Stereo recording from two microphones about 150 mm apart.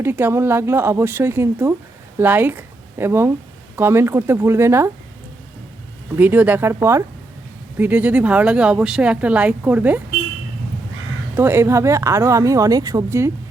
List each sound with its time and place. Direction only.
0.0 s speech: 15° right (ahead or behind)
6.1 s speech: 10° right (ahead or behind)
11.3 s speech: 15° right (ahead or behind)